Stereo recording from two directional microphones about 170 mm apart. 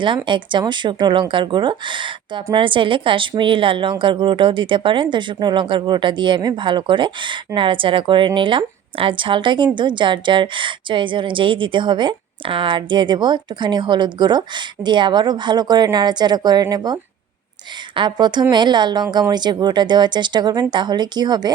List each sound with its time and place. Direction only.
0.3 s speech: 30° right (ahead or behind)